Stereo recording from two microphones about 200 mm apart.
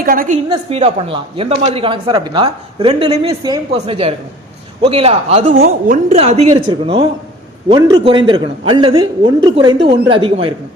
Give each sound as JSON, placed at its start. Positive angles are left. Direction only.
{"t": 0.0, "sound": "a woman's voice", "side_deg": -45}
{"t": 0.7, "sound": "speech", "side_deg": -30}
{"t": 5.5, "sound": "a woman's voice", "side_deg": -50}
{"t": 6.1, "sound": "speech", "side_deg": -30}